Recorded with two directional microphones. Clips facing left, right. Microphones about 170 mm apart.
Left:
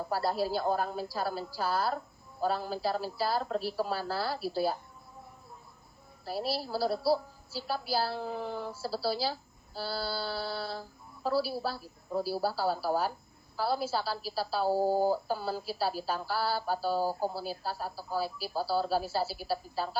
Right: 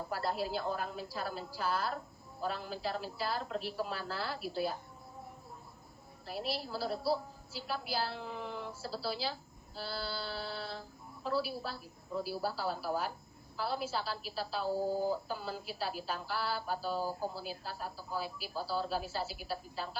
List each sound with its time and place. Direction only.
0.1 s a woman's voice: 35° left (ahead or behind)
6.2 s a woman's voice: 35° left (ahead or behind)